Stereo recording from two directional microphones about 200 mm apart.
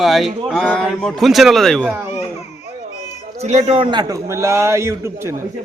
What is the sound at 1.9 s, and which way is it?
Speech, 10° right (ahead or behind).